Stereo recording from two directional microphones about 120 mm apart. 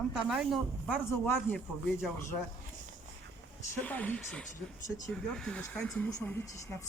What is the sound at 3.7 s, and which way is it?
Speech, 10° left (ahead or behind).